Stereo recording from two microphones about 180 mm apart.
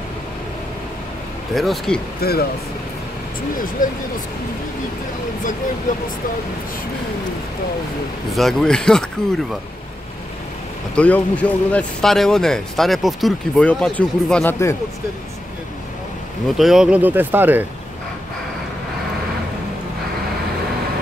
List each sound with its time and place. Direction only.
1.5 s a man's voice: centre (ahead or behind)
2.2 s speech: 60° left (ahead or behind)
3.8 s speech: 50° left (ahead or behind)
8.4 s a man's voice: centre (ahead or behind)
11.0 s a man's voice: 10° left (ahead or behind)
16.4 s speech: centre (ahead or behind)